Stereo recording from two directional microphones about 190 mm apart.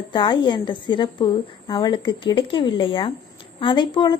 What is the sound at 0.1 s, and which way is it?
A woman's voice, 25° left (ahead or behind).